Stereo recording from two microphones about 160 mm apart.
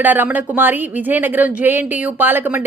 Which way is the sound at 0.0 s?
10° right (ahead or behind).